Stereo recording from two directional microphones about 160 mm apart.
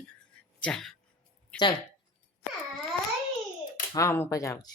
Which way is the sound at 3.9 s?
20° left (ahead or behind).